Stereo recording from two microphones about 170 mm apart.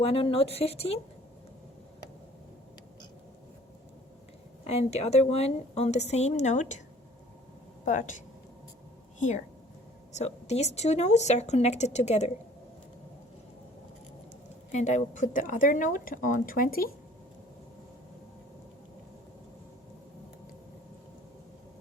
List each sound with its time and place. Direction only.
0.0 s speech: 35° left (ahead or behind)
4.6 s speech: 40° left (ahead or behind)
7.9 s speech: 50° left (ahead or behind)
14.7 s speech: 45° left (ahead or behind)